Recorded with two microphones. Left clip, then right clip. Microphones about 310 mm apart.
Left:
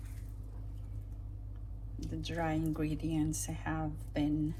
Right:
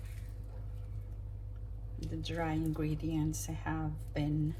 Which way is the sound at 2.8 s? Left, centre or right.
Left.